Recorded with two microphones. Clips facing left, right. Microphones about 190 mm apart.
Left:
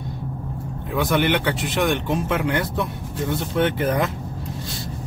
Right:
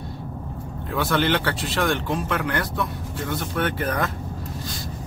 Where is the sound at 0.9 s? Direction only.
20° left (ahead or behind).